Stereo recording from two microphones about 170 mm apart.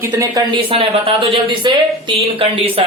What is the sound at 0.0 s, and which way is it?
Speech, 20° right (ahead or behind).